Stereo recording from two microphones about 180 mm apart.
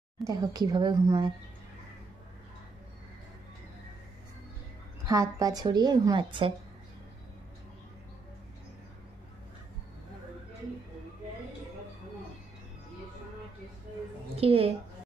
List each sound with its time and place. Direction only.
0.3 s speech: 20° right (ahead or behind)
5.0 s speech: 20° right (ahead or behind)
14.3 s a woman's voice: 35° right (ahead or behind)